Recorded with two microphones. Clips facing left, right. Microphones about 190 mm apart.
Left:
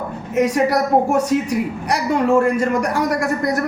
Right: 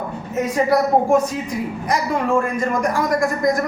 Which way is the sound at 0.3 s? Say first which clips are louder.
Left 1 dB; 75° left (ahead or behind).